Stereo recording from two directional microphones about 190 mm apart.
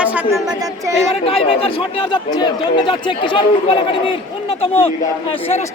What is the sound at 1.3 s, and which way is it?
A man's voice, 30° left (ahead or behind).